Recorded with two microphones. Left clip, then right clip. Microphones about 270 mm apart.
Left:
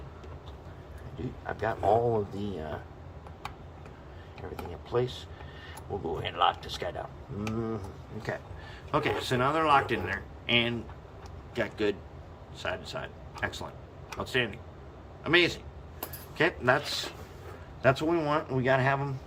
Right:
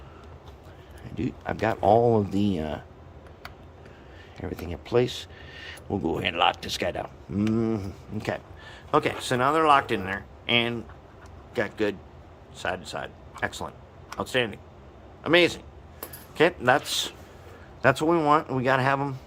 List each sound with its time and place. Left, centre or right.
1.2 s speech: right
4.4 s speech: right
8.2 s a man's voice: right